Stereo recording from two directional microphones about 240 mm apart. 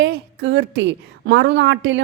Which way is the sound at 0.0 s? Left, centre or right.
Right.